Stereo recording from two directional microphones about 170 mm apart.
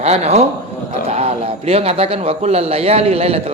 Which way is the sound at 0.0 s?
40° right (ahead or behind).